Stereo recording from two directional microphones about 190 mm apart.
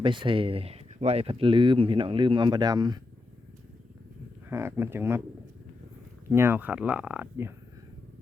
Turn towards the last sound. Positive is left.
turn(degrees=-10)  # may be behind; listen again after turning